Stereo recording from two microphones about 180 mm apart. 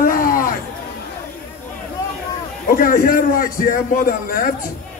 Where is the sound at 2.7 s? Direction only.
50° left (ahead or behind).